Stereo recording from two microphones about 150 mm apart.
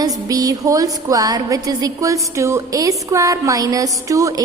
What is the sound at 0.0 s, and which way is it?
A woman's voice, 25° right (ahead or behind).